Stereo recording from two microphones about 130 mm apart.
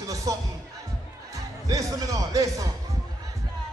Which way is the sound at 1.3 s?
25° right (ahead or behind).